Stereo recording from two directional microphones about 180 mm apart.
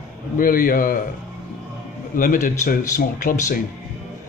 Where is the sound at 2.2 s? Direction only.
50° left (ahead or behind).